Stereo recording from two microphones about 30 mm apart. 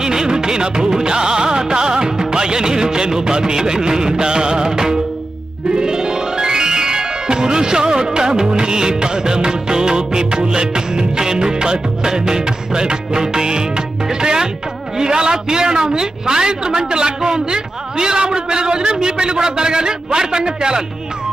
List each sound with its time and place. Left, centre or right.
0.0 s music: centre
14.9 s a man's voice: right